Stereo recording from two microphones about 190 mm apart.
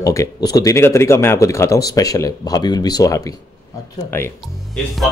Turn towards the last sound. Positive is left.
turn(degrees=0)  # may be behind; listen again after turning